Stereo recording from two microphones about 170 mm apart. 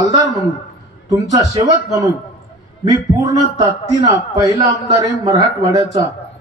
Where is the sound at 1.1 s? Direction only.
20° right (ahead or behind).